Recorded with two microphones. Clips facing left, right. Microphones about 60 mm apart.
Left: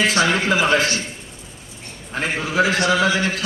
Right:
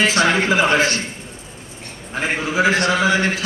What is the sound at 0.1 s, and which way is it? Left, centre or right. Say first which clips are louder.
Speech: right 1 dB; centre.